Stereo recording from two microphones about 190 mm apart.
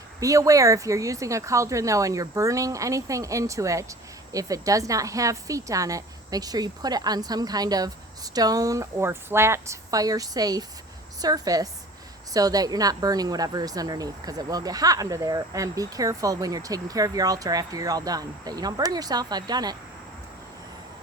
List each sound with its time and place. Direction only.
0.2 s a woman's voice: 15° right (ahead or behind)